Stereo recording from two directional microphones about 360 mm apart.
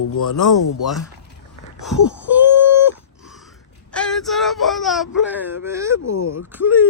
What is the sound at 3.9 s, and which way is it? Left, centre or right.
Speech, centre.